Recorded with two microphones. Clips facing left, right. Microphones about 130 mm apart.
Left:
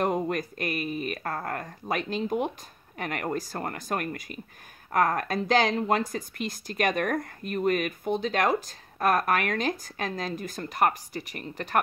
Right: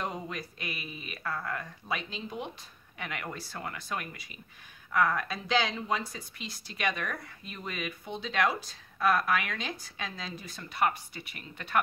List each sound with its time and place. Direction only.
0.0 s speech: 55° left (ahead or behind)